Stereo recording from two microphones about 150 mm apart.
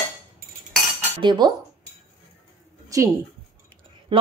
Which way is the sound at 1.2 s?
30° right (ahead or behind).